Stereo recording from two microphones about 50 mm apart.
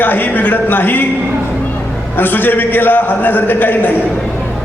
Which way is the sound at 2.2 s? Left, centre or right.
Left.